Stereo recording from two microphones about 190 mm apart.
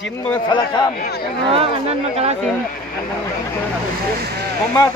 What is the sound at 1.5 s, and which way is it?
Speech, 30° right (ahead or behind).